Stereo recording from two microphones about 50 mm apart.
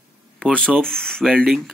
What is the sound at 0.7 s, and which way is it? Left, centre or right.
Speech, centre.